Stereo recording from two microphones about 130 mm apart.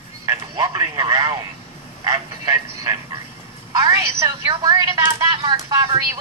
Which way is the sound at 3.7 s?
30° right (ahead or behind).